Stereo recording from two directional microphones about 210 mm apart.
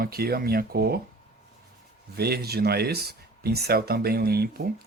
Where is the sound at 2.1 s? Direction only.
50° right (ahead or behind).